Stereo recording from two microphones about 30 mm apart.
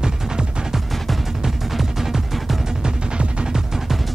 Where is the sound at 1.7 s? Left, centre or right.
Centre.